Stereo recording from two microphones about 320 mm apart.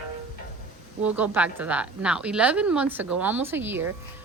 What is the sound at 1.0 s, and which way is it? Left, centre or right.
A woman's voice, centre.